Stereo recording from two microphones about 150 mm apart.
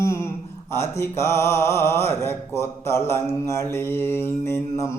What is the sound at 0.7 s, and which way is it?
Speech, 20° left (ahead or behind).